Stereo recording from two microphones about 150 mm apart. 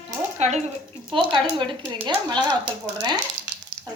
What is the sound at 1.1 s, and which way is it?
A woman's voice, 35° right (ahead or behind).